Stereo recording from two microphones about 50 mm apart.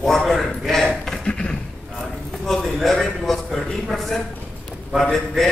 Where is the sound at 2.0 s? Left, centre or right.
Centre.